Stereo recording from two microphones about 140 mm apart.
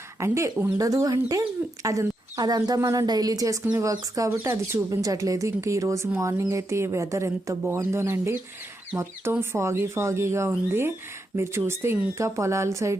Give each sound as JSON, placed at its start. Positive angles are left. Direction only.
{"t": 0.2, "sound": "a woman's voice", "side_deg": -20}